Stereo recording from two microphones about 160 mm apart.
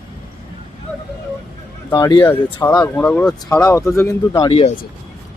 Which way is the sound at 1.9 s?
25° left (ahead or behind).